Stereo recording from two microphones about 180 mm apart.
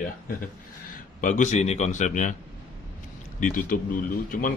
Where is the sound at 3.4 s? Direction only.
50° left (ahead or behind).